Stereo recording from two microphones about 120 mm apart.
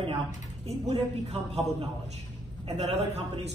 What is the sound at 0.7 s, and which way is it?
A woman's voice, 60° right (ahead or behind).